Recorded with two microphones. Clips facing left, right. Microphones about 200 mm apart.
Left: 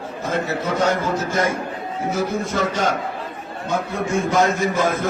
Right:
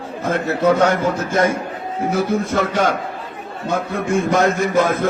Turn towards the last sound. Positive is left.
turn(degrees=-60)  # may be behind; listen again after turning